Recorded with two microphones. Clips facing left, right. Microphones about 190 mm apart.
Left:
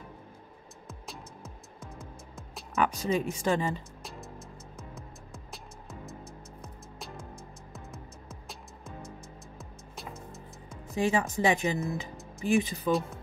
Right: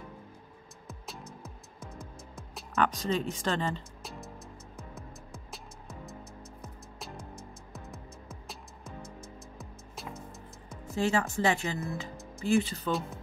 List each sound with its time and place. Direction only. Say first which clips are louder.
0.8 s music: even; centre (ahead or behind)
2.8 s speech: left 1 dB; 10° left (ahead or behind)
4.7 s music: right 1 dB; centre (ahead or behind)
7.7 s music: even; centre (ahead or behind)
11.0 s speech: left 1 dB; 15° left (ahead or behind)